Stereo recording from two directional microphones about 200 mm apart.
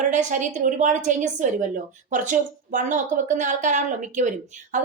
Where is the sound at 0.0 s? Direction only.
40° right (ahead or behind).